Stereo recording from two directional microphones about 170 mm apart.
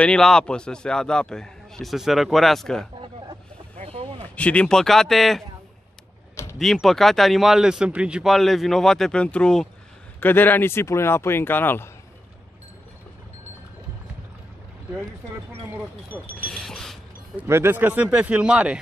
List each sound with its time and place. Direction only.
0.0 s a man's voice: 5° left (ahead or behind)
3.7 s a sound: 40° right (ahead or behind)
4.4 s a man's voice: 5° left (ahead or behind)
6.6 s a man's voice: centre (ahead or behind)
16.4 s a sound: 5° left (ahead or behind)
17.4 s speech: 15° right (ahead or behind)